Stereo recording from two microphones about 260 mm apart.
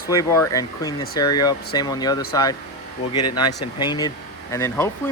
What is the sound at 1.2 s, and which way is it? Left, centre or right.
Speech, left.